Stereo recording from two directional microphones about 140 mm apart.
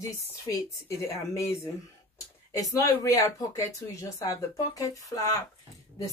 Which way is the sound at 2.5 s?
25° left (ahead or behind).